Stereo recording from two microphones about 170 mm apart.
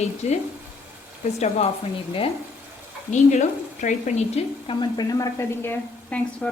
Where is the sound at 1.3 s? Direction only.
40° left (ahead or behind).